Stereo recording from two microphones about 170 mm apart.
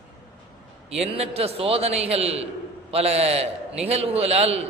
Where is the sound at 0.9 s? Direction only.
35° right (ahead or behind).